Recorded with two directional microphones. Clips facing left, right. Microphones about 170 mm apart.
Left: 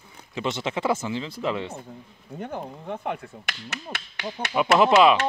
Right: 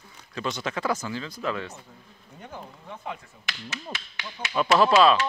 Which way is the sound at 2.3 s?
55° left (ahead or behind).